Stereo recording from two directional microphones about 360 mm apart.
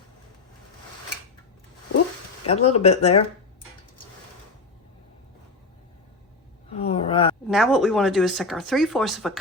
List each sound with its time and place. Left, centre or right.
2.5 s speech: centre
6.7 s a sound: centre
7.4 s speech: centre